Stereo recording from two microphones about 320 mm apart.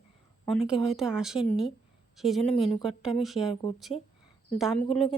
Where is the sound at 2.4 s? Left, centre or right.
Centre.